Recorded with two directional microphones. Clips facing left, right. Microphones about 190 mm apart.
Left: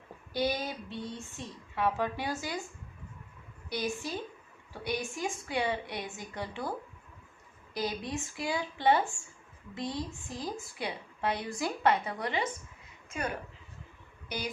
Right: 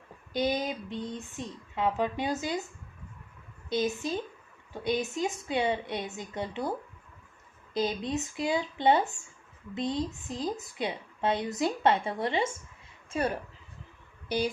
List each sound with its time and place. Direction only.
0.3 s a woman's voice: 20° right (ahead or behind)
3.7 s a woman's voice: 20° right (ahead or behind)